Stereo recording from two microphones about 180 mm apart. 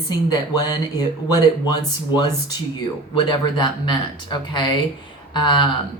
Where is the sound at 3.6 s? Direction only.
25° left (ahead or behind).